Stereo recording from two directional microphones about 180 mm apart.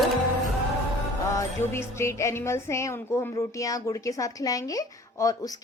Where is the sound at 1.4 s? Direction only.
15° left (ahead or behind).